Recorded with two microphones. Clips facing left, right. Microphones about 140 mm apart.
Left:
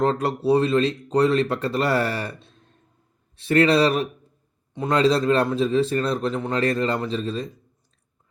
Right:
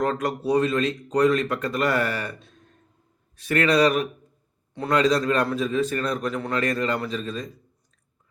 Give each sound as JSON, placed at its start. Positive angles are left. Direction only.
{"t": 0.0, "sound": "speech", "side_deg": 30}